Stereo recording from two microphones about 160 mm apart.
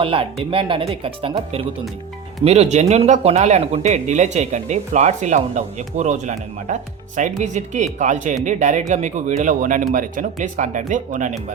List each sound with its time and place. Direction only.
0.0 s speech: 35° right (ahead or behind); by 11.3 s 50° right (ahead or behind)